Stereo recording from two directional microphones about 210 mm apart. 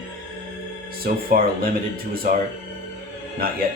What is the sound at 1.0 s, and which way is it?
Speech, 45° right (ahead or behind).